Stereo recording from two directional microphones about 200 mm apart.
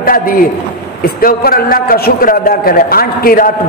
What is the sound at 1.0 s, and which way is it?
A man's voice, 45° left (ahead or behind).